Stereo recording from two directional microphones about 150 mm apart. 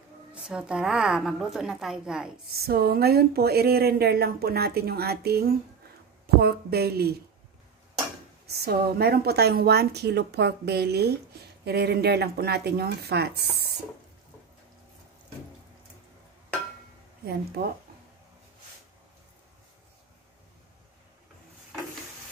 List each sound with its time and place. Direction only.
0.3 s a woman's voice: 5° right (ahead or behind)
2.6 s speech: 90° right
8.5 s speech: 90° right
17.6 s speech: 90° right